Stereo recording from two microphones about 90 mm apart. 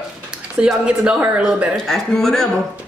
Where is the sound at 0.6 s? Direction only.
10° right (ahead or behind).